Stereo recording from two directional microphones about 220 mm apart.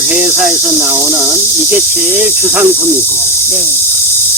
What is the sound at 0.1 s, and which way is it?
Speech, 10° right (ahead or behind).